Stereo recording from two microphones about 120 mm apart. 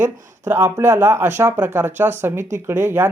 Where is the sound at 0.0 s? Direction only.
20° right (ahead or behind).